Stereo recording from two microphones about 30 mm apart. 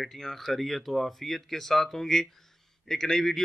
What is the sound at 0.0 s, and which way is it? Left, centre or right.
A man's voice, centre.